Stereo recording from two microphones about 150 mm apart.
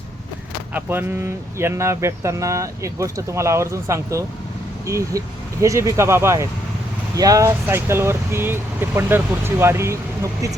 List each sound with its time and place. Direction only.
0.7 s speech: 15° right (ahead or behind)